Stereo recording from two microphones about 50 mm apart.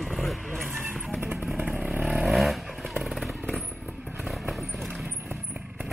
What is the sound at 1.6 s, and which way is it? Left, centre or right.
Motorcycle, right.